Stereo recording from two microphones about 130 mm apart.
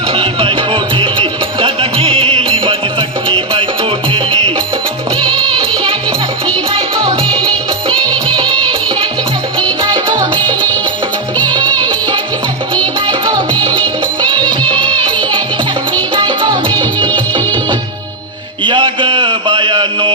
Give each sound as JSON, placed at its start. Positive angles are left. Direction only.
{"t": 0.1, "sound": "music", "side_deg": -40}
{"t": 9.8, "sound": "music", "side_deg": -35}
{"t": 11.4, "sound": "music", "side_deg": -35}
{"t": 14.4, "sound": "music", "side_deg": 10}
{"t": 16.1, "sound": "music", "side_deg": -35}
{"t": 18.6, "sound": "mantra", "side_deg": -40}